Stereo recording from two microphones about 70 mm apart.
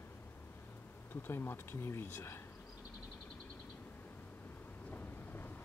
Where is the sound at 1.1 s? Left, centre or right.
Left.